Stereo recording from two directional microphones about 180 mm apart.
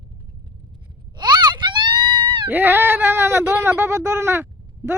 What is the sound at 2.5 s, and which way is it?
Speech, 10° right (ahead or behind).